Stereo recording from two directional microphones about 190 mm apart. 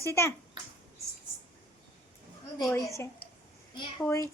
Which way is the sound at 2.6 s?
15° left (ahead or behind).